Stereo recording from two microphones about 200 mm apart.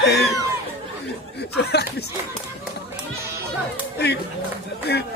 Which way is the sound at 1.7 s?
55° left (ahead or behind).